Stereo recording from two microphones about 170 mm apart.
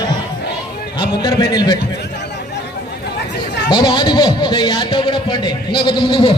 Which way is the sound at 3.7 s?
30° left (ahead or behind).